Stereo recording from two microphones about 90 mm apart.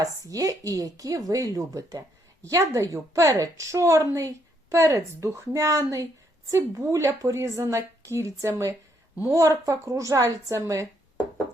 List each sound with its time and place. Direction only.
0.0 s a woman's voice: 40° right (ahead or behind)